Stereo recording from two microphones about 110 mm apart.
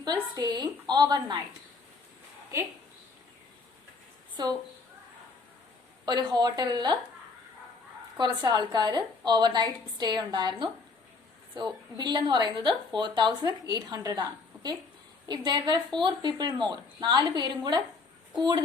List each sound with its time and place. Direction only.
0.0 s a woman's voice: 40° right (ahead or behind)
6.1 s a woman's voice: 40° right (ahead or behind)
8.2 s a woman's voice: 40° right (ahead or behind)